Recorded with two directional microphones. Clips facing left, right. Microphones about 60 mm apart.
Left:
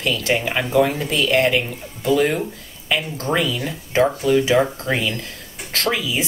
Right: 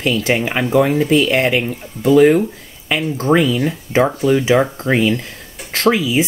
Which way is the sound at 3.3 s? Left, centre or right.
Right.